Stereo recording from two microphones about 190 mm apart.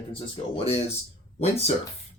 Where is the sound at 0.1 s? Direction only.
30° left (ahead or behind).